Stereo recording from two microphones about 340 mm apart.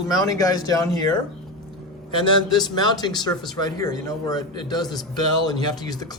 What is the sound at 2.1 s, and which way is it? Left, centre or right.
Speech, centre.